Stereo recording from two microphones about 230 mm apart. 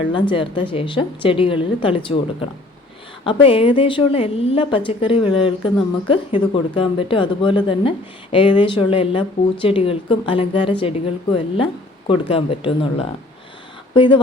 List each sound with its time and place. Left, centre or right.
0.1 s speech: left
3.4 s speech: left